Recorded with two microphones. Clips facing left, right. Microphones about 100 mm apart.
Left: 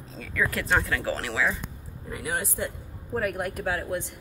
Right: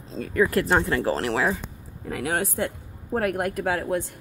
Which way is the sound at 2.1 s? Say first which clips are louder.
Right 5 dB; 90° right.